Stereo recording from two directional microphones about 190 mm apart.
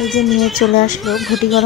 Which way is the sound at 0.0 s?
Centre (ahead or behind).